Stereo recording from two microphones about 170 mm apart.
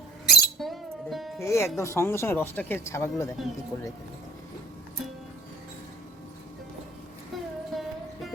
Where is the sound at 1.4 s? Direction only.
15° left (ahead or behind).